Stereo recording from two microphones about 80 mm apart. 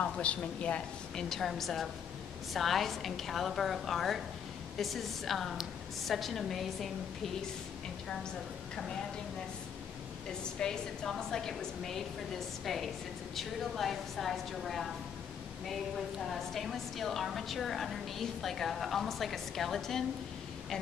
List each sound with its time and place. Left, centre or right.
0.0 s a woman's voice: centre
10.4 s a woman's voice: centre
16.2 s a woman's voice: centre